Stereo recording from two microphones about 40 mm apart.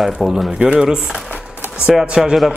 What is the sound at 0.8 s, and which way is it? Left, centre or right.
Speech, right.